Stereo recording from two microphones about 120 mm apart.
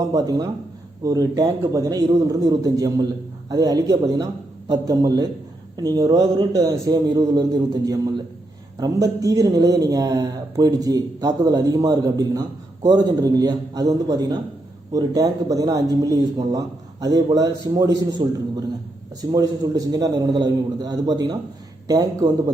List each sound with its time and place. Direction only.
0.1 s speech: 30° right (ahead or behind)